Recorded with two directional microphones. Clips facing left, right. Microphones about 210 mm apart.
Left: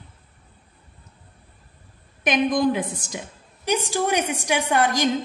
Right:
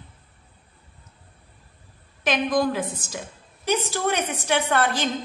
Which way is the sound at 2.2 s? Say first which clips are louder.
Left 2 dB; 20° left (ahead or behind).